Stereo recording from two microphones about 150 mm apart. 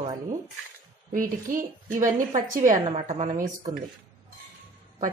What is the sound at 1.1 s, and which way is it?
A woman's voice, 65° right (ahead or behind).